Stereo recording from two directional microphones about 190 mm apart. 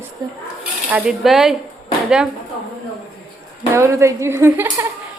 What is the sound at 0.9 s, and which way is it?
Speech, 5° right (ahead or behind).